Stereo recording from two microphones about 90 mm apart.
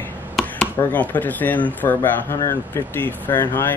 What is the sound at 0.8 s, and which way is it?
Speech, 20° left (ahead or behind).